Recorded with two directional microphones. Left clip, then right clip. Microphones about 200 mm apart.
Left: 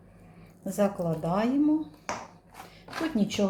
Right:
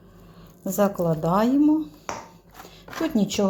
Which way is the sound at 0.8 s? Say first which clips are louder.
Right 5 dB; 35° right (ahead or behind).